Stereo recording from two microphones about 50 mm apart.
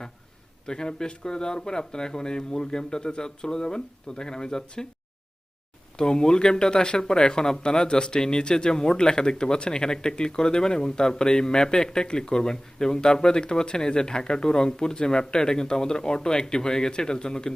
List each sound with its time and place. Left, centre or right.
0.7 s speech: centre
6.0 s speech: centre